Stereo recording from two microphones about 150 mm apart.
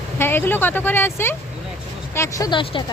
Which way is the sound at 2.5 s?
35° left (ahead or behind).